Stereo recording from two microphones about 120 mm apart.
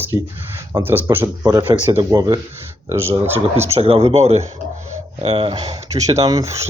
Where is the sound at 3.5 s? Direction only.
60° right (ahead or behind).